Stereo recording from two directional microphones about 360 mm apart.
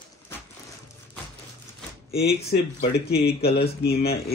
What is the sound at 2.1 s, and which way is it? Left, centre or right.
Speech, left.